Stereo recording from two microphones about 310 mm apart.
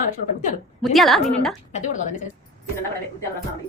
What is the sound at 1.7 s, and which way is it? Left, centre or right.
Speech, left.